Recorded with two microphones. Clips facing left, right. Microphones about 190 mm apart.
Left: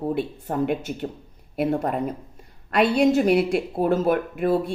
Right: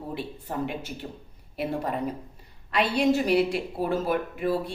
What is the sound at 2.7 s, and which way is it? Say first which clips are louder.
A woman's voice: left 5 dB; 50° left (ahead or behind).